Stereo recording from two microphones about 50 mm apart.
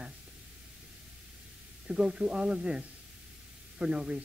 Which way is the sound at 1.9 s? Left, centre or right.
Centre.